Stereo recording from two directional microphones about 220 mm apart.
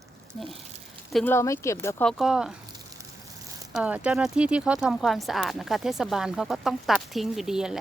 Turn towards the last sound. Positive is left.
turn(degrees=0)  # may be behind; listen again after turning